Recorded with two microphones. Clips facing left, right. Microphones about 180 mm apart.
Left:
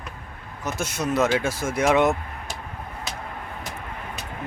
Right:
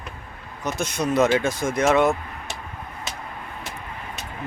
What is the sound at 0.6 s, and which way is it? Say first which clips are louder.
Speech: right 2 dB; 5° left (ahead or behind).